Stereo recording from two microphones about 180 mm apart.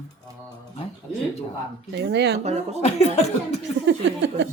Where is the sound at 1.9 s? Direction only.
75° right (ahead or behind).